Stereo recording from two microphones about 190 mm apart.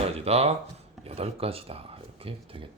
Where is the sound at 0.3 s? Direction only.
35° right (ahead or behind).